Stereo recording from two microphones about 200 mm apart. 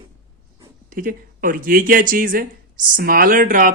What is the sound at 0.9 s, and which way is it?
Speech, 45° right (ahead or behind).